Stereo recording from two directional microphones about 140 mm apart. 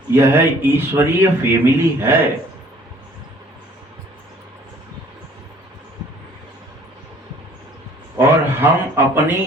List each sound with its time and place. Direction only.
0.1 s a man's voice: 15° right (ahead or behind)
8.2 s a man's voice: 15° right (ahead or behind)